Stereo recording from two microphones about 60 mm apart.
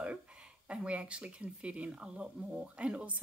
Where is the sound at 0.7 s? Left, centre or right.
Centre.